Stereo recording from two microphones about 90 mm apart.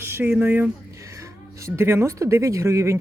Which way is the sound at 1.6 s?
30° right (ahead or behind).